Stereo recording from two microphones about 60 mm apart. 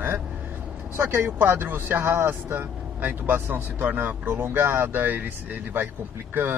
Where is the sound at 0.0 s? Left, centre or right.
Right.